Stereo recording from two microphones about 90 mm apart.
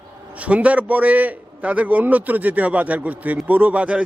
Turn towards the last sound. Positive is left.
turn(degrees=-15)  # may be behind; listen again after turning